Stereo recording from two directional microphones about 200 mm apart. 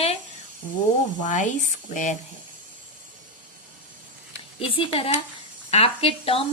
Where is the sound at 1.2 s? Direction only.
40° left (ahead or behind).